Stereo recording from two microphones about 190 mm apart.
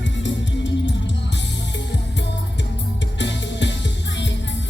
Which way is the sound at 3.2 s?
70° left (ahead or behind).